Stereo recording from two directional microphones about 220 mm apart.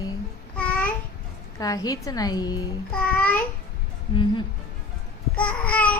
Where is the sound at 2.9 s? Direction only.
5° left (ahead or behind).